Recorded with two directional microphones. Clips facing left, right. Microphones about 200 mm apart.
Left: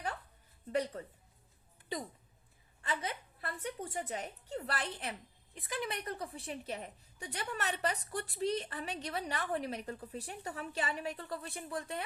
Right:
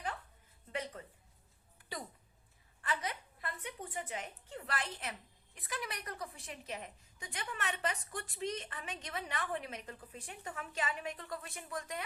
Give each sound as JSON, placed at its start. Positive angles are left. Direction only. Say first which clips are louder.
{"t": 0.7, "sound": "a woman's voice", "louder": "left 7 dB", "side_deg": 40}
{"t": 2.8, "sound": "a sound", "louder": "left 1 dB", "side_deg": 25}
{"t": 3.6, "sound": "a woman's voice", "louder": "left 6 dB", "side_deg": 40}